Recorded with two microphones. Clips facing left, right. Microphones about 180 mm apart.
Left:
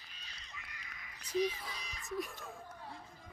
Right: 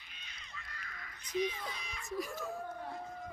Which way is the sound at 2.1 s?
Centre (ahead or behind).